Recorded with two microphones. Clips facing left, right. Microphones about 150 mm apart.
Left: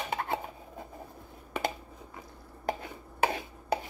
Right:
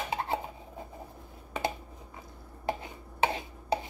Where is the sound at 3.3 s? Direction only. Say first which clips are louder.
Even; 25° right (ahead or behind).